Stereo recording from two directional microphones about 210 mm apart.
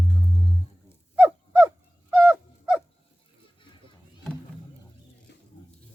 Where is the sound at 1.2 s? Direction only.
10° right (ahead or behind).